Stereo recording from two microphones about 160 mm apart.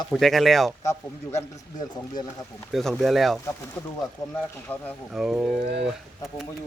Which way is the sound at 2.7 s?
Centre (ahead or behind).